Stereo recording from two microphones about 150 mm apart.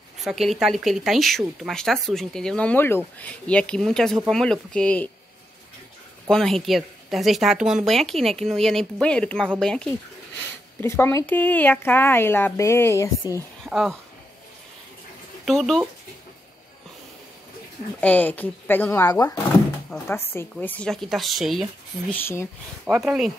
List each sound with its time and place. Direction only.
0.2 s speech: centre (ahead or behind)
6.2 s speech: 5° left (ahead or behind)
10.8 s speech: 15° left (ahead or behind)
13.7 s speech: 5° right (ahead or behind)
15.4 s speech: centre (ahead or behind)
18.0 s speech: 10° left (ahead or behind)
19.0 s speech: 25° left (ahead or behind)
20.3 s speech: 10° left (ahead or behind)
22.1 s speech: 15° left (ahead or behind)
22.9 s speech: 5° right (ahead or behind)